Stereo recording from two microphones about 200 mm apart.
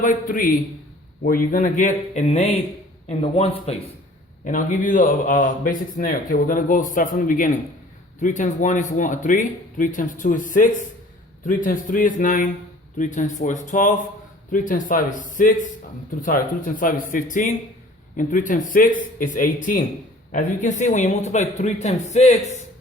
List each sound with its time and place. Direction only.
0.0 s a man's voice: 40° left (ahead or behind)